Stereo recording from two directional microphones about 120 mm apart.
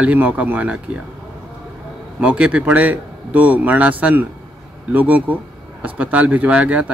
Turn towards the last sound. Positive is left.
turn(degrees=-10)  # may be behind; listen again after turning